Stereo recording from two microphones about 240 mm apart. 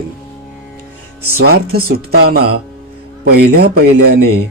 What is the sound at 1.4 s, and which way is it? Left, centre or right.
Speech, right.